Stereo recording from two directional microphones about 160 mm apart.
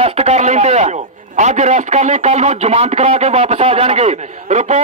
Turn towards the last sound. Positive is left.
turn(degrees=-45)  # may be behind; listen again after turning